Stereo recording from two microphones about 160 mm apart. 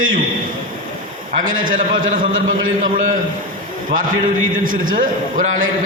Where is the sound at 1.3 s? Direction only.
55° right (ahead or behind).